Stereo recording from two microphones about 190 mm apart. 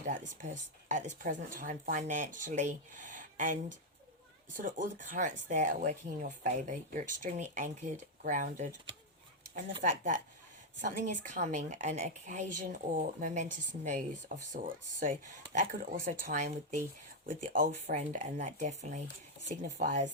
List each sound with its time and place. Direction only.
0.4 s a woman's voice: 40° right (ahead or behind)
4.6 s a woman's voice: 45° right (ahead or behind)
9.8 s a woman's voice: 40° right (ahead or behind)